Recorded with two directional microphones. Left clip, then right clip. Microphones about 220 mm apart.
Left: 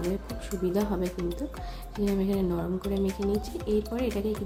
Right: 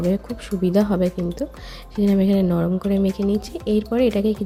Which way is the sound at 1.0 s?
Centre (ahead or behind).